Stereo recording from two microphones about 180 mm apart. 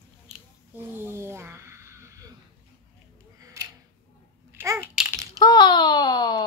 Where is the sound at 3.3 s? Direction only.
20° right (ahead or behind).